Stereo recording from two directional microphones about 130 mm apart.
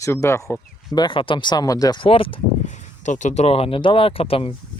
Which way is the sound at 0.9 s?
35° left (ahead or behind).